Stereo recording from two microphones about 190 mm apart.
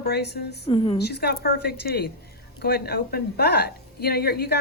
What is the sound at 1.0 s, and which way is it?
A woman's voice, 60° left (ahead or behind).